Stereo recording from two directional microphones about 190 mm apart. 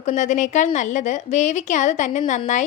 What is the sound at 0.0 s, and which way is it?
A woman's voice, 40° left (ahead or behind).